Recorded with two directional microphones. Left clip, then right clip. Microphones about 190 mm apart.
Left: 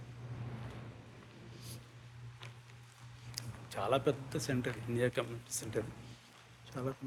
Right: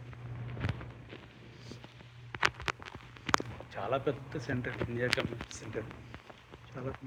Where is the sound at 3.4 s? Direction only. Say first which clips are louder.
Right 1 dB; 25° left (ahead or behind).